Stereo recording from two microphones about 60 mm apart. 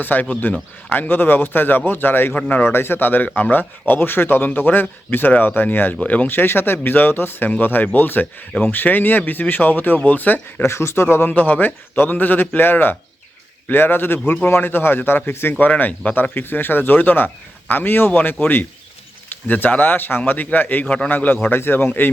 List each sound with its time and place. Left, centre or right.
0.0 s speech: left
10.6 s speech: left
11.3 s speech: left
15.5 s speech: left
20.8 s a man's voice: centre
21.1 s speech: left